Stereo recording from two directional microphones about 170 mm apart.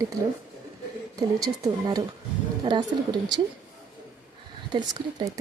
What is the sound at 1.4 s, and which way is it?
A woman's voice, 20° right (ahead or behind).